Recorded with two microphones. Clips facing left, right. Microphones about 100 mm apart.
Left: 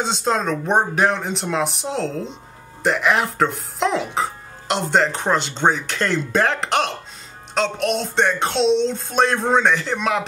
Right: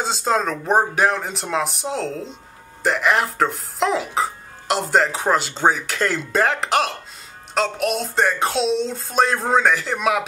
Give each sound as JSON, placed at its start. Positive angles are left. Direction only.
{"t": 0.0, "sound": "speech", "side_deg": 0}